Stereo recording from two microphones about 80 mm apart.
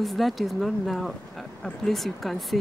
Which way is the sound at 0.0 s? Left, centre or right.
Centre.